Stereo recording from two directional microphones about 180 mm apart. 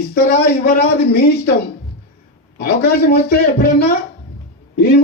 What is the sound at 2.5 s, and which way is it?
Speech, 60° left (ahead or behind).